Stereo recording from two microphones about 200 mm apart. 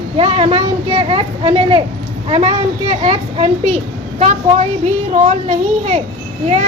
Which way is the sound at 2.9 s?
30° right (ahead or behind).